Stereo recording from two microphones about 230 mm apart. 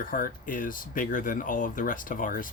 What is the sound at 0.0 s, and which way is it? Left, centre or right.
Speech, left.